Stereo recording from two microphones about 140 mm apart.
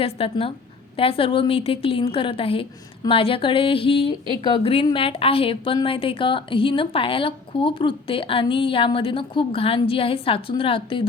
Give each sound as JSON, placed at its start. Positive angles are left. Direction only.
{"t": 0.0, "sound": "a woman's voice", "side_deg": 45}